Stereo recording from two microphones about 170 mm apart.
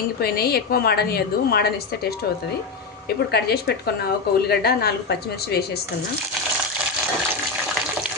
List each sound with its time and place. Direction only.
0.2 s a woman's voice: 65° left (ahead or behind)
3.3 s a woman's voice: 70° left (ahead or behind)